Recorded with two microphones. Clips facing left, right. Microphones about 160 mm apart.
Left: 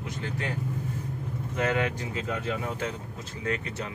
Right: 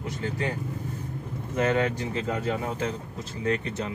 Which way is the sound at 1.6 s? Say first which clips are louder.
Right 3 dB; 30° right (ahead or behind).